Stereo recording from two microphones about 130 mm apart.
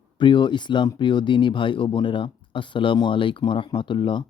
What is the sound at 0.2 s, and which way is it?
Speech, 35° left (ahead or behind).